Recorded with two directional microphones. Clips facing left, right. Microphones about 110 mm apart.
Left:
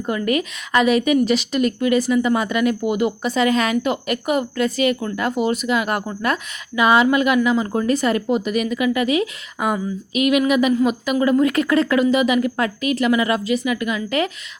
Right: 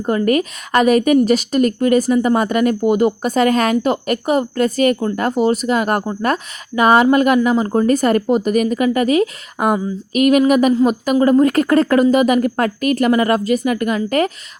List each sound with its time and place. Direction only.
0.0 s a woman's voice: 40° right (ahead or behind)